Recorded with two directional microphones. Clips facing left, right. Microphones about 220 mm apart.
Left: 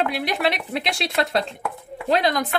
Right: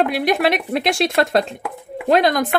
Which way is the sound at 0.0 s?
45° right (ahead or behind).